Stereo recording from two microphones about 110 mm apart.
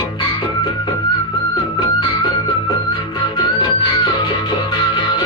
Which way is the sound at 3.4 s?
45° left (ahead or behind).